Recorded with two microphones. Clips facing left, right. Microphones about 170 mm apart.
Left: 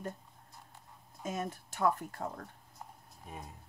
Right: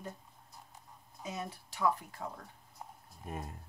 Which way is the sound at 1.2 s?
50° left (ahead or behind).